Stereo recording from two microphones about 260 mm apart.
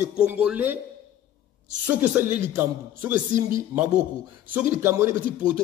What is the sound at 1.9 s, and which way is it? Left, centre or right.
Speech, centre.